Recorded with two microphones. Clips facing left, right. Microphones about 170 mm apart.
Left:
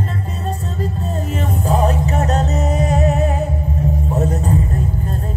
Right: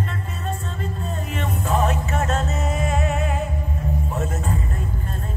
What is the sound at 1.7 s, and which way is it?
Music, 35° left (ahead or behind).